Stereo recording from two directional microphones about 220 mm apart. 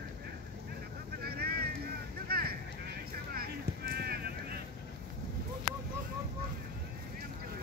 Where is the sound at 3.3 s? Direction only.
45° right (ahead or behind).